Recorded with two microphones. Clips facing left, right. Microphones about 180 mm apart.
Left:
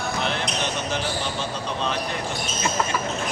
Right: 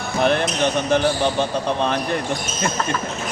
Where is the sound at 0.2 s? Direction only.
55° right (ahead or behind).